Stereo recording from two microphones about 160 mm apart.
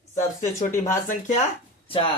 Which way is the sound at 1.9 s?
35° left (ahead or behind).